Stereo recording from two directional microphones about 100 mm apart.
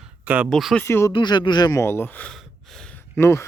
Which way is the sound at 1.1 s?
50° left (ahead or behind).